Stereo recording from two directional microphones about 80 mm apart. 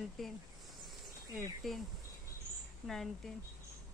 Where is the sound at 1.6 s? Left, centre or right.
Centre.